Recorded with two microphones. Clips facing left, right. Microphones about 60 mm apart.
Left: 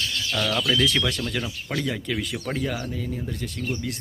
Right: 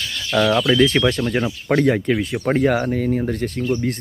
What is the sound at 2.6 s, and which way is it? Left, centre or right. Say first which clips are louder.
Speech: right 11 dB; right.